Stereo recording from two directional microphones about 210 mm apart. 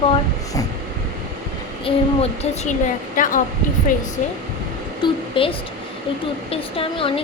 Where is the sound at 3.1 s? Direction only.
40° left (ahead or behind).